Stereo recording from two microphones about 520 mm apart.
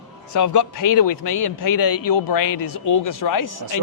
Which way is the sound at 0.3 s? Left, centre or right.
Left.